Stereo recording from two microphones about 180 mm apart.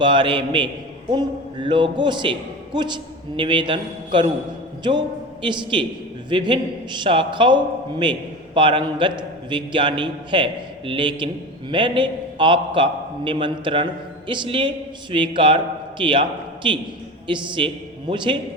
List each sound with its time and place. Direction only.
0.0 s a man's voice: 25° right (ahead or behind)